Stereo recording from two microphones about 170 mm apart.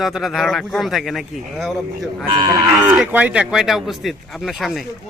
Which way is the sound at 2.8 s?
10° right (ahead or behind).